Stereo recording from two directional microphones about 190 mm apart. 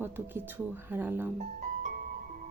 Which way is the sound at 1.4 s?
45° right (ahead or behind).